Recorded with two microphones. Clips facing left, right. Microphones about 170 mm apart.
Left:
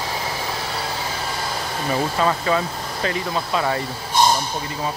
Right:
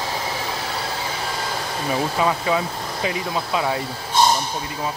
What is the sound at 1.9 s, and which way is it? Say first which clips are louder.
Speech: even; 5° right (ahead or behind).